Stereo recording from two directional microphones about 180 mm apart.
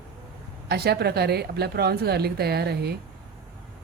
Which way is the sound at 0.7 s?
60° right (ahead or behind).